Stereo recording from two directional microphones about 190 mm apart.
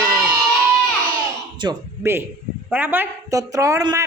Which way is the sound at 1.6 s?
15° right (ahead or behind).